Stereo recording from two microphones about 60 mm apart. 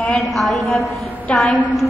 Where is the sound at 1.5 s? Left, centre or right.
Left.